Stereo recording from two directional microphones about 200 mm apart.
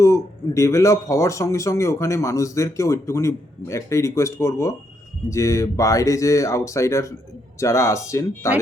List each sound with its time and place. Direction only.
0.0 s a man's voice: 15° left (ahead or behind)